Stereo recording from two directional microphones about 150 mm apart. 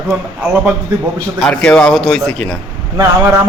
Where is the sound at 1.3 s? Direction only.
5° left (ahead or behind).